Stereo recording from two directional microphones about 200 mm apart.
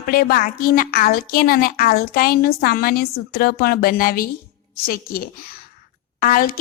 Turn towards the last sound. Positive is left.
turn(degrees=45)  # may be behind; listen again after turning